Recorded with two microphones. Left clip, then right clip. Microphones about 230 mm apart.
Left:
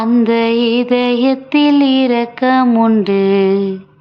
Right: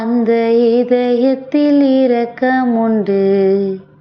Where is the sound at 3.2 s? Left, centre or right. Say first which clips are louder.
Right 1 dB; left.